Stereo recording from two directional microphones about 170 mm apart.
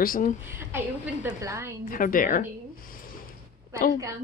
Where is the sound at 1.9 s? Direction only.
55° left (ahead or behind).